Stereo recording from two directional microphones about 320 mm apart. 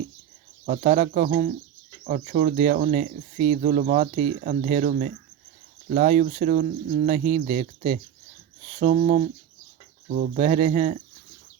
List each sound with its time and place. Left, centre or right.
0.6 s speech: right